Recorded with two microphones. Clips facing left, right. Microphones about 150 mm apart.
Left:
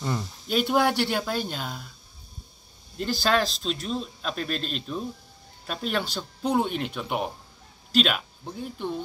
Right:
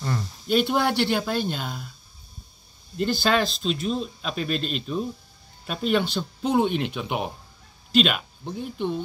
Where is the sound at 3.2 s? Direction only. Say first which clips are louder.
Even; centre (ahead or behind).